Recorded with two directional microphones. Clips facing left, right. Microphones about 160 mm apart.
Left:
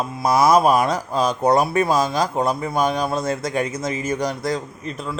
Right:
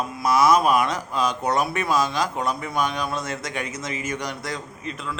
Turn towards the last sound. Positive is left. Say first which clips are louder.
# left 3 dB
turn(degrees=35)  # may be behind; listen again after turning